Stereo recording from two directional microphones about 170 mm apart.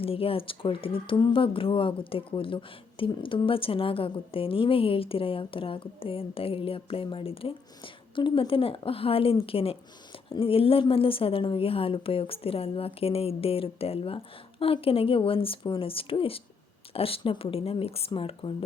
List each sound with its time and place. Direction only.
0.0 s speech: 35° left (ahead or behind)